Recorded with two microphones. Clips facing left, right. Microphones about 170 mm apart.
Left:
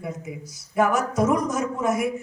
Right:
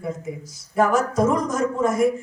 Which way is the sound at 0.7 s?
5° left (ahead or behind).